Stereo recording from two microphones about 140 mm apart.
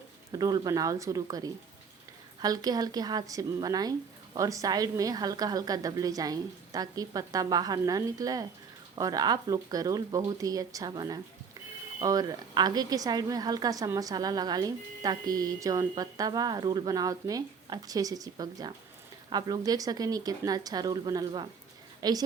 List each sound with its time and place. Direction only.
0.3 s a woman's voice: 30° right (ahead or behind)